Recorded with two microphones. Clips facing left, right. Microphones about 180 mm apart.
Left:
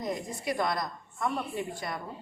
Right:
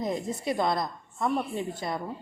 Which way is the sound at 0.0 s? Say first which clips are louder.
Right 4 dB; 25° right (ahead or behind).